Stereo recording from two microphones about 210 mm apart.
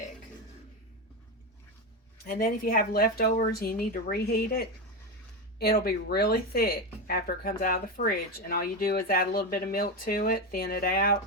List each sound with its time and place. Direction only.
2.2 s speech: 45° left (ahead or behind)